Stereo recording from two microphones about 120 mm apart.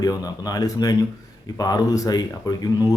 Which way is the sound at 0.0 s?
30° left (ahead or behind).